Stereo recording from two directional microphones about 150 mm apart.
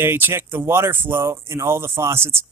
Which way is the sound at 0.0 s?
15° right (ahead or behind).